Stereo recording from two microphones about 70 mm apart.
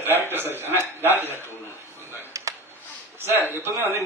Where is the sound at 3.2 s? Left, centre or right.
Right.